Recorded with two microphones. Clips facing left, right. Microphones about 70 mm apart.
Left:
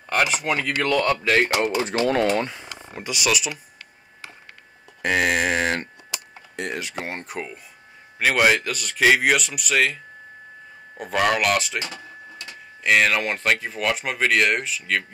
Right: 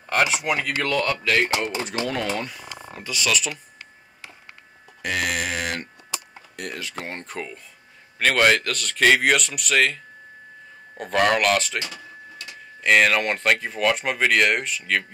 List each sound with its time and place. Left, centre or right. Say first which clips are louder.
0.0 s speech: even; centre
1.0 s speech: left 3 dB; centre
1.3 s speech: left 2 dB; left
2.9 s speech: left 1 dB; centre
5.0 s a sound: left 5 dB; left
6.5 s speech: left 4 dB; left; by 9.9 s centre
11.0 s speech: right 1 dB; centre
11.8 s a sound: left 1 dB; left
12.8 s speech: right 1 dB; centre